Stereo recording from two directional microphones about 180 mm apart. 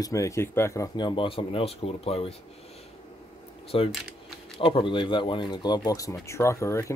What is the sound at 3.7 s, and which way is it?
Speech, 30° left (ahead or behind).